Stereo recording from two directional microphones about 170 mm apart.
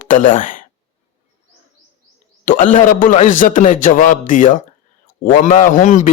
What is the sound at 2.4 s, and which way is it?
A man's voice, 50° left (ahead or behind).